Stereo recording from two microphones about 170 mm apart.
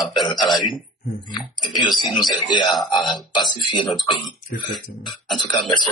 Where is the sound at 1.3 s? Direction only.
25° left (ahead or behind).